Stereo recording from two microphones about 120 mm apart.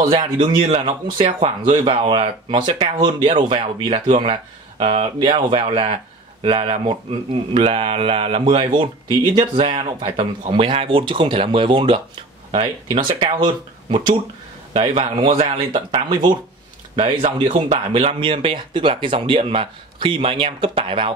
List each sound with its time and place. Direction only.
0.0 s speech: 40° right (ahead or behind)
14.7 s speech: 55° right (ahead or behind)